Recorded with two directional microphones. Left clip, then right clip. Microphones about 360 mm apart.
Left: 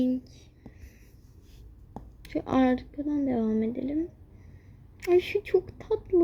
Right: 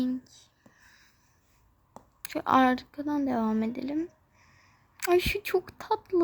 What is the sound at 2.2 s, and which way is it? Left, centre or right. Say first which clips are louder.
Speech: right 3 dB; centre.